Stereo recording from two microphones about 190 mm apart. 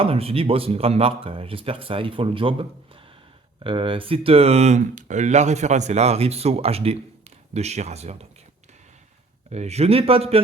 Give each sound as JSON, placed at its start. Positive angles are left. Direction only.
{"t": 0.0, "sound": "speech", "side_deg": -30}
{"t": 9.5, "sound": "speech", "side_deg": -35}